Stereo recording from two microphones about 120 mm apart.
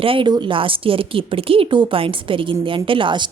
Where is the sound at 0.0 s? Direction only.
45° right (ahead or behind).